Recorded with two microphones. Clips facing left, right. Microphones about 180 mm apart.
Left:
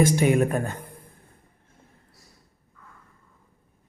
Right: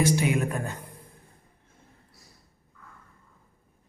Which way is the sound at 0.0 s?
50° left (ahead or behind).